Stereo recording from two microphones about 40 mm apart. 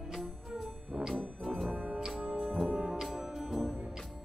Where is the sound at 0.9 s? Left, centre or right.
Centre.